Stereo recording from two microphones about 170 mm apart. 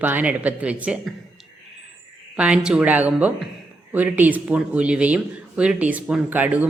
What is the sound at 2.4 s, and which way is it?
A woman's voice, 5° right (ahead or behind).